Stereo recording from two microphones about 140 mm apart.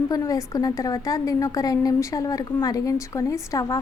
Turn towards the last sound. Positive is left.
turn(degrees=20)  # may be behind; listen again after turning